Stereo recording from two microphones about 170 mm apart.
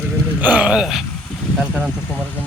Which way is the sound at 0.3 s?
10° right (ahead or behind).